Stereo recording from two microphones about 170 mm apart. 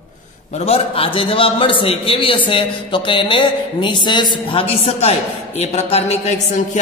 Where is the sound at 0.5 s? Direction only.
40° left (ahead or behind).